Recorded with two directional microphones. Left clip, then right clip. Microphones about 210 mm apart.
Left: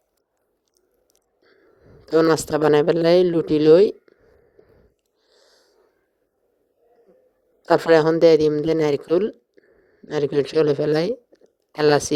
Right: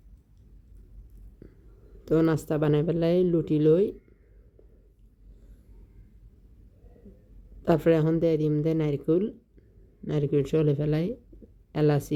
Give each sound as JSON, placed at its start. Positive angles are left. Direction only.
{"t": 2.3, "sound": "speech", "side_deg": 25}
{"t": 7.7, "sound": "speech", "side_deg": 25}